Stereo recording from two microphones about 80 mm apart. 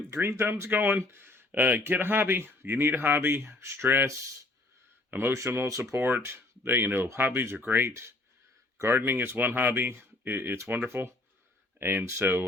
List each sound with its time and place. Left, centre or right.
0.1 s speech: right
5.1 s speech: right